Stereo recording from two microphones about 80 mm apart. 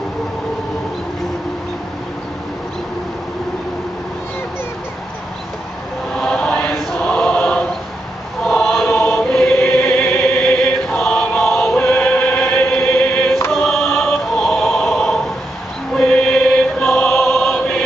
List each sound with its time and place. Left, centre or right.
6.1 s chant: centre
6.7 s choir: centre
10.3 s chant: centre
11.7 s music: centre
15.9 s mantra: centre
17.1 s choir: centre